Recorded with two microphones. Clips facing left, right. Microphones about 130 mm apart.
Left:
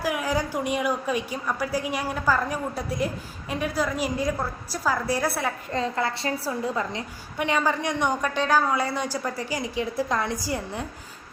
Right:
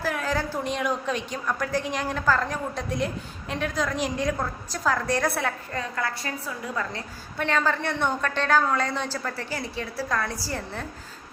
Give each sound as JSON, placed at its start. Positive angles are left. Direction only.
{"t": 0.0, "sound": "a woman's voice", "side_deg": 10}
{"t": 5.7, "sound": "a woman's voice", "side_deg": 25}
{"t": 6.7, "sound": "a woman's voice", "side_deg": 15}